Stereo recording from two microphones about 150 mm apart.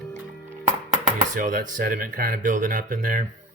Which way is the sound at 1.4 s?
70° right (ahead or behind).